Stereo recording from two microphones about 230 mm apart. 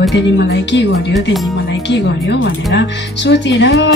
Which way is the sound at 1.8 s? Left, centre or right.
Left.